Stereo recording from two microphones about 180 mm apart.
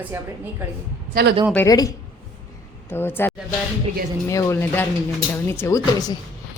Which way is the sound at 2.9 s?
10° left (ahead or behind).